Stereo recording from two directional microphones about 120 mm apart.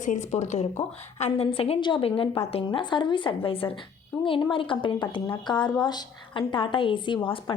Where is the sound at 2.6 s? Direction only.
40° left (ahead or behind).